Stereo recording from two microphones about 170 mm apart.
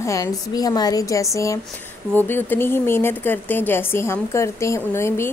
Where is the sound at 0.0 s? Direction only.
20° left (ahead or behind).